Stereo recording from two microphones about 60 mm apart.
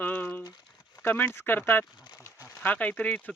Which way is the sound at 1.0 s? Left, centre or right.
Left.